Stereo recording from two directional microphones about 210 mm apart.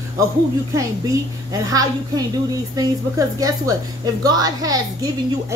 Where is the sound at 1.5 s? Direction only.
15° right (ahead or behind).